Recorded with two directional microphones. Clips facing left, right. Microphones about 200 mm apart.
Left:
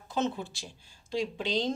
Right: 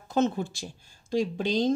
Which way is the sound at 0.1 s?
45° right (ahead or behind).